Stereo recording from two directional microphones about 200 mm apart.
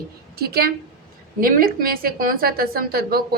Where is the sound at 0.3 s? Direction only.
50° right (ahead or behind).